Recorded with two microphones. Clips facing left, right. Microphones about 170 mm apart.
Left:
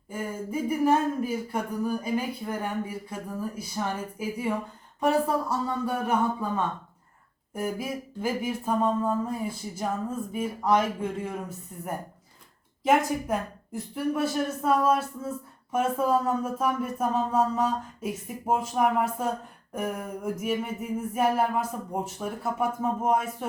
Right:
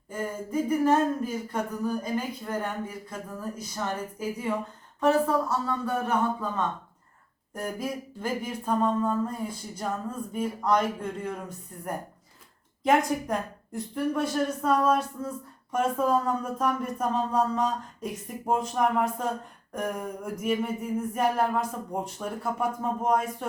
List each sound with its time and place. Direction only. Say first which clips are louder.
0.1 s speech: right 1 dB; 10° left (ahead or behind)
12.8 s speech: even; 5° left (ahead or behind)